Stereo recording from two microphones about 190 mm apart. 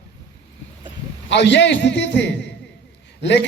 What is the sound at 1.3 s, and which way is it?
Speech, 65° left (ahead or behind).